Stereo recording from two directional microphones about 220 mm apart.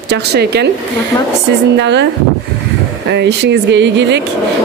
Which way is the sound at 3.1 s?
50° right (ahead or behind).